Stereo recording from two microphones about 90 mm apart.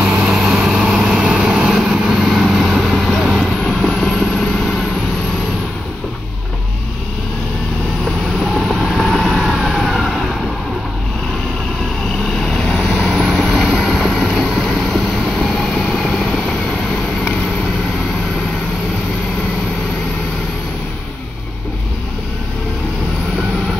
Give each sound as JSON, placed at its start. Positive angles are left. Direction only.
{"t": 0.0, "sound": "vehicle", "side_deg": -5}
{"t": 8.4, "sound": "vehicle", "side_deg": -5}
{"t": 12.4, "sound": "vehicle", "side_deg": 5}